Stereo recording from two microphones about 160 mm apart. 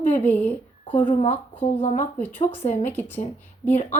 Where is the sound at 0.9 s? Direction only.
50° left (ahead or behind).